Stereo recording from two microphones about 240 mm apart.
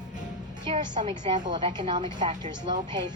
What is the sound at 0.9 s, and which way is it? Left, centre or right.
A woman's voice, right.